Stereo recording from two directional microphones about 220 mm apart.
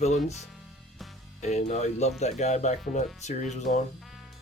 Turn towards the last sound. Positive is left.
turn(degrees=30)  # may be behind; listen again after turning